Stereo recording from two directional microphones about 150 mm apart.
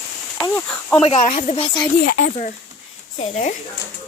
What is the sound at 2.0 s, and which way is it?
Speech, 65° left (ahead or behind).